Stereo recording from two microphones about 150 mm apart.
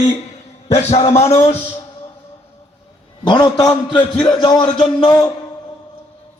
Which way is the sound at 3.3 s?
30° left (ahead or behind).